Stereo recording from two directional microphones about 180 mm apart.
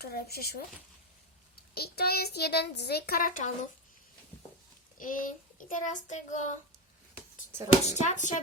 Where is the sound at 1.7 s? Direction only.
60° left (ahead or behind).